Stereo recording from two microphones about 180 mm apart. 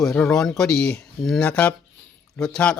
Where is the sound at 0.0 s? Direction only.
5° left (ahead or behind).